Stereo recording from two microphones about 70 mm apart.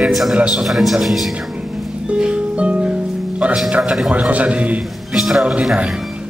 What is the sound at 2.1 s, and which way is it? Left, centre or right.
Music, centre.